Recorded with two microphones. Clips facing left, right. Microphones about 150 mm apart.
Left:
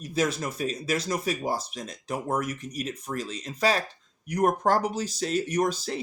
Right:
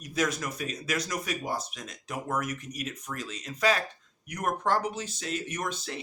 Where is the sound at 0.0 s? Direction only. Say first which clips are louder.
Left 3 dB; 30° left (ahead or behind).